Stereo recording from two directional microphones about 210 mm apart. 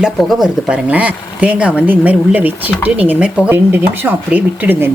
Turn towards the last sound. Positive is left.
turn(degrees=-10)  # may be behind; listen again after turning